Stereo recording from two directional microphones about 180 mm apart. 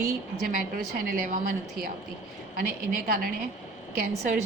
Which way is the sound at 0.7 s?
55° right (ahead or behind).